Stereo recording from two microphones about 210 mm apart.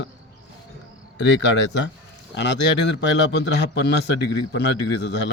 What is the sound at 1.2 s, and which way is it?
Speech, 60° left (ahead or behind).